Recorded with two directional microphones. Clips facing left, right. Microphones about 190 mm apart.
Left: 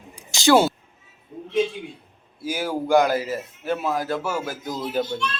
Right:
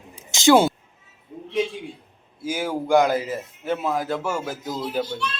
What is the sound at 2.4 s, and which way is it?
Speech, 20° right (ahead or behind).